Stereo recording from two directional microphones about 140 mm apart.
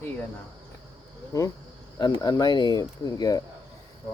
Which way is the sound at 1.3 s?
25° left (ahead or behind).